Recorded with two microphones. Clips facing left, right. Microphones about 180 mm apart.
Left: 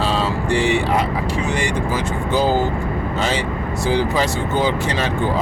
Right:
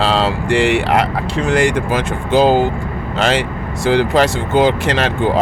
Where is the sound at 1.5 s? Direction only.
90° right.